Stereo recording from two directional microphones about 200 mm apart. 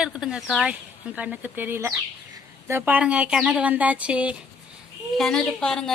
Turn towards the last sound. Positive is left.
turn(degrees=5)  # may be behind; listen again after turning